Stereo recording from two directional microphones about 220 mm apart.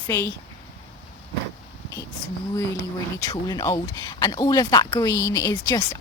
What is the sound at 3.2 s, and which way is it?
Speech, 20° left (ahead or behind).